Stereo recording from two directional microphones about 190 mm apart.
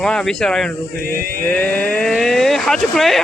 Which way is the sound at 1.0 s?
50° right (ahead or behind).